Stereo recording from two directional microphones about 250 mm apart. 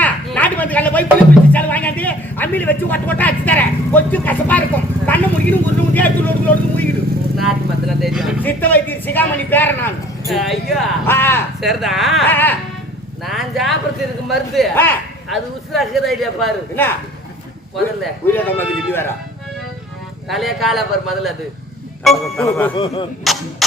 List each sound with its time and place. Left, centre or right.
0.0 s a sound: centre
1.5 s a man's voice: centre
7.3 s vehicle: centre
11.7 s a man's voice: centre
18.0 s speech: centre
20.2 s a man's voice: centre
22.7 s speech: centre
23.2 s a sound: centre